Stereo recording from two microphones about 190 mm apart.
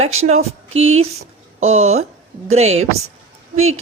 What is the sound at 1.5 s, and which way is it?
Speech, 35° right (ahead or behind).